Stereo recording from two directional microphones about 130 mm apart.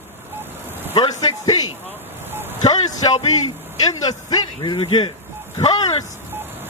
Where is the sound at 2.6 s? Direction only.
30° left (ahead or behind).